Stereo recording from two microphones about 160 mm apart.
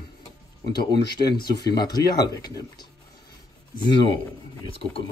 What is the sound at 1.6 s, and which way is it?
Speech, 25° left (ahead or behind).